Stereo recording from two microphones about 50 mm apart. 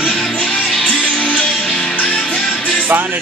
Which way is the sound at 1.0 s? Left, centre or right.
Left.